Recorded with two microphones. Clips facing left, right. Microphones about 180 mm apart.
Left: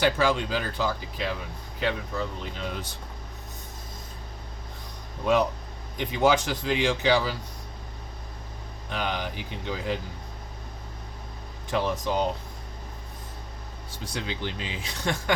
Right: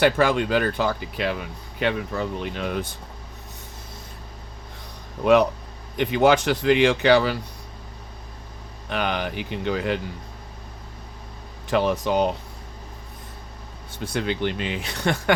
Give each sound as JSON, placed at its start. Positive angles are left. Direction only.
{"t": 0.0, "sound": "speech", "side_deg": -60}
{"t": 5.2, "sound": "speech", "side_deg": -70}
{"t": 8.9, "sound": "speech", "side_deg": -65}
{"t": 11.7, "sound": "speech", "side_deg": -65}
{"t": 14.0, "sound": "speech", "side_deg": -60}